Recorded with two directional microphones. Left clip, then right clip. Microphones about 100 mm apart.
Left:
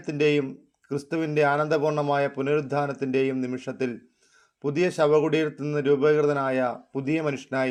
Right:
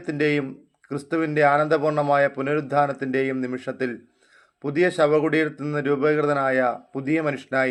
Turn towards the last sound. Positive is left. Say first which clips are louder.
# right 3 dB
turn(degrees=40)  # may be behind; listen again after turning